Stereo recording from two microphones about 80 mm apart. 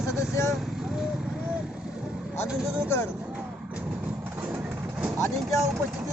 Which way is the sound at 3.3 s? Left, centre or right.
Centre.